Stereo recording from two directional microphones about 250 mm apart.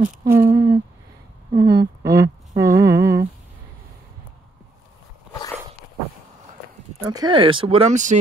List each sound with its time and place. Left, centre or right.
0.2 s speech: centre
7.0 s speech: centre